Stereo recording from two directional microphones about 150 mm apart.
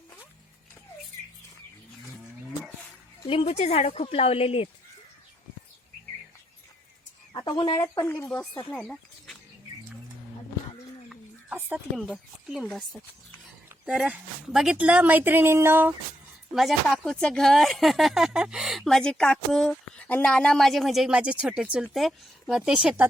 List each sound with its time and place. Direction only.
3.2 s speech: 40° left (ahead or behind)
7.3 s bird: 30° left (ahead or behind)
7.8 s speech: 15° left (ahead or behind)
8.7 s a sound: 5° left (ahead or behind)
11.1 s chicken: 10° right (ahead or behind)
11.9 s speech: 5° right (ahead or behind)
16.6 s speech: centre (ahead or behind)